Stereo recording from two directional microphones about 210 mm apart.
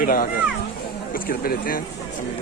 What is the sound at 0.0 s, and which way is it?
Speech, 40° left (ahead or behind).